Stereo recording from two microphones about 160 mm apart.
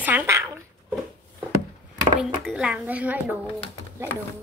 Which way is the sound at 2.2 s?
5° right (ahead or behind).